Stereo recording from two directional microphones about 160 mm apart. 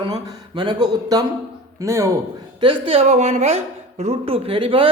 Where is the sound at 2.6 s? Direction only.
30° right (ahead or behind).